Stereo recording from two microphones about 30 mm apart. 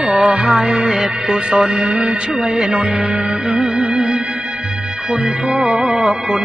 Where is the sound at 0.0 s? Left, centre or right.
Right.